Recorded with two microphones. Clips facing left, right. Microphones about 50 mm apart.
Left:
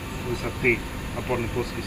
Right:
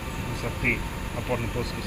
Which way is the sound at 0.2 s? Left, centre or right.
Centre.